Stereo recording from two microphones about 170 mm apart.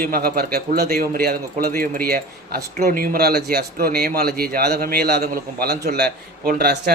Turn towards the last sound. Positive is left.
turn(degrees=-70)  # may be behind; listen again after turning